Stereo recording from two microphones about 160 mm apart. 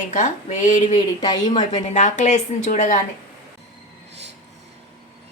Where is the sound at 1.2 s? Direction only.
25° left (ahead or behind).